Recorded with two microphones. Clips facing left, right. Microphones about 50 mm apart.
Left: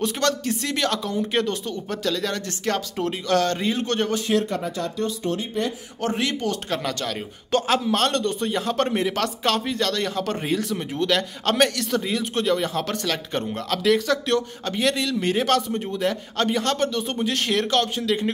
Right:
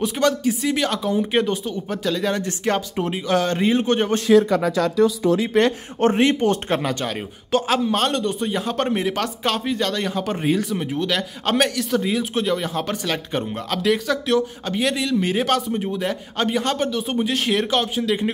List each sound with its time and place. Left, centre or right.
0.0 s a man's voice: centre
5.5 s speech: right
5.9 s speech: right
6.8 s speech: centre
7.5 s a man's voice: centre